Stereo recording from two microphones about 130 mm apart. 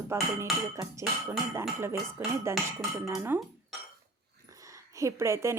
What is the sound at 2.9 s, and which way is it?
Speech, 25° right (ahead or behind).